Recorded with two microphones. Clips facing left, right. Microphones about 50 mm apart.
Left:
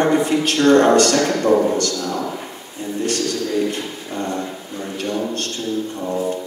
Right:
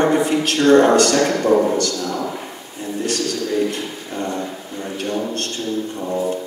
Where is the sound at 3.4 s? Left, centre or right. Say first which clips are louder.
Right 2 dB; centre.